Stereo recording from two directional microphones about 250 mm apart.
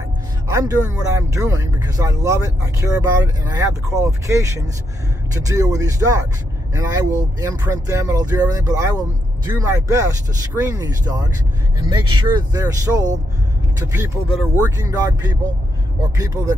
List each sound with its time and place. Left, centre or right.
0.5 s speech: centre
16.2 s speech: centre